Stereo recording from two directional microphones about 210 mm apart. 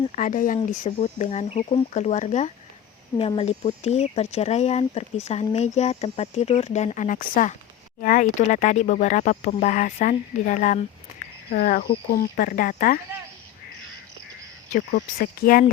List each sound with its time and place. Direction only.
0.2 s speech: 40° left (ahead or behind)
14.7 s speech: 40° left (ahead or behind)